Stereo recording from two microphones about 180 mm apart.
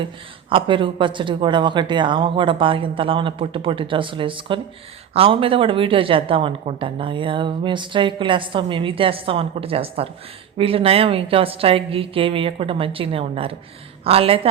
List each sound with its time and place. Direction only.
0.5 s a woman's voice: 30° right (ahead or behind)